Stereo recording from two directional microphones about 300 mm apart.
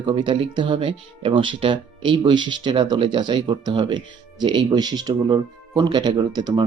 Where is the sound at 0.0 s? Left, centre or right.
Centre.